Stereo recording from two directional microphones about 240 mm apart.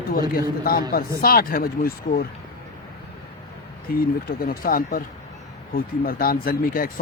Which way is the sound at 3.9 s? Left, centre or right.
Left.